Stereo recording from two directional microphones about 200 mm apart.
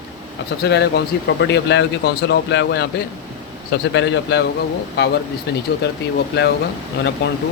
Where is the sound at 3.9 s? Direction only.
65° left (ahead or behind).